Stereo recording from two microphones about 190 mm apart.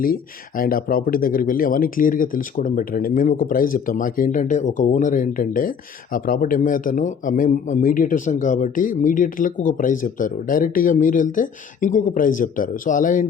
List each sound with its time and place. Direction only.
0.0 s speech: 50° left (ahead or behind)